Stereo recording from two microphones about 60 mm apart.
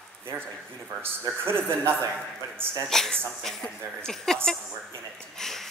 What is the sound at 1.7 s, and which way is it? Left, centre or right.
Speech, centre.